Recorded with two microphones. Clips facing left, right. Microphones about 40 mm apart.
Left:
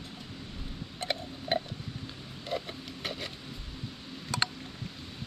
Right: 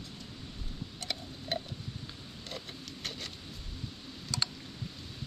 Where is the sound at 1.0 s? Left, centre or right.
Left.